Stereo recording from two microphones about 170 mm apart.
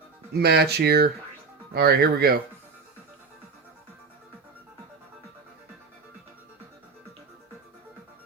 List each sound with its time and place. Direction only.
0.3 s speech: 70° right (ahead or behind)